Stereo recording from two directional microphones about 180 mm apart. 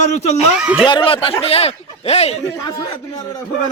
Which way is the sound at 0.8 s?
30° left (ahead or behind).